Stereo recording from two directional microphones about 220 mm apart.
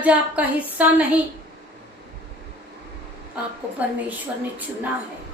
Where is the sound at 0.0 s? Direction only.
5° right (ahead or behind).